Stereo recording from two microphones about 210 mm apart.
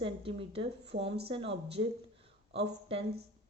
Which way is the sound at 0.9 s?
50° right (ahead or behind).